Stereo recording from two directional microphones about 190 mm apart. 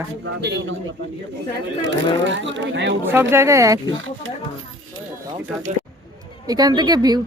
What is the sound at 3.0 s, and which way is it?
Speech, 10° right (ahead or behind).